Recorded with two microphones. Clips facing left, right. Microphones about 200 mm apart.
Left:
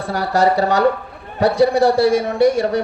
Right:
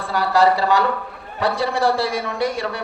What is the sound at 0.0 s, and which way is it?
A man's voice, 45° left (ahead or behind).